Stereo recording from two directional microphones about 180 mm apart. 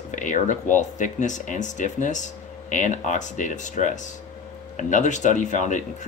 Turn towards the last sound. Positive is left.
turn(degrees=45)  # may be behind; listen again after turning